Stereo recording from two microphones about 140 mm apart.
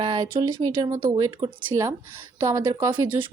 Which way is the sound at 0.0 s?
35° right (ahead or behind).